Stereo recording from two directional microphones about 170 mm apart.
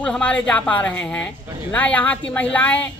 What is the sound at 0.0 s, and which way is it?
Speech, 5° left (ahead or behind).